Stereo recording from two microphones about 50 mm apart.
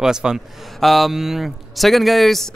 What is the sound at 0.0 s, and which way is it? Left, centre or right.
Speech, centre.